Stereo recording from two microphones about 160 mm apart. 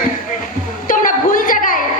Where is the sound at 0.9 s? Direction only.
60° left (ahead or behind).